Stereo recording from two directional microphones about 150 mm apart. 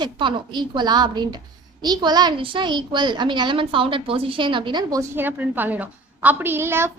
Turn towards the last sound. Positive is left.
turn(degrees=-15)  # may be behind; listen again after turning